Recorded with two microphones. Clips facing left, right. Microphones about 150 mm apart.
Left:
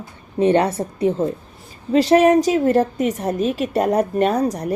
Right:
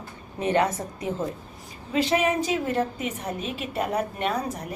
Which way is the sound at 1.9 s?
40° left (ahead or behind).